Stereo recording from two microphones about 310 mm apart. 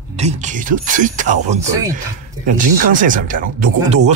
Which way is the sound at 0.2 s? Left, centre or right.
Right.